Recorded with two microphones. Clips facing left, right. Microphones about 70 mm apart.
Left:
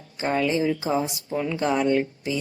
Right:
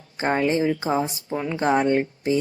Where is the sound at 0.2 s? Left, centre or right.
Right.